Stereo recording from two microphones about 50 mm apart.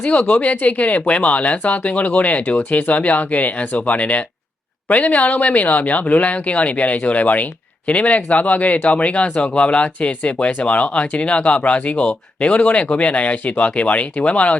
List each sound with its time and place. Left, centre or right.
0.0 s speech: centre
0.4 s speech: left